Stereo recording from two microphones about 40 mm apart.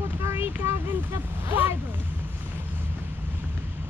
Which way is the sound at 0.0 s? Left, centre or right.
Right.